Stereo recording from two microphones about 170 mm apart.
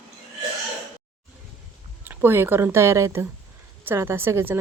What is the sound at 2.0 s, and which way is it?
Speech, 10° right (ahead or behind).